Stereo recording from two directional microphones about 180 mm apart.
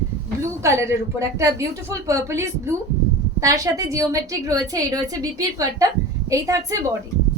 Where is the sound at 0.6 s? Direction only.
15° right (ahead or behind).